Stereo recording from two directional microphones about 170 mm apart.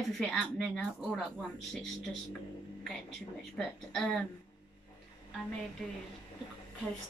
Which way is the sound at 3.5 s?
Centre (ahead or behind).